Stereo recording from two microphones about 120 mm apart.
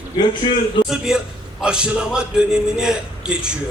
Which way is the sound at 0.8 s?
5° right (ahead or behind).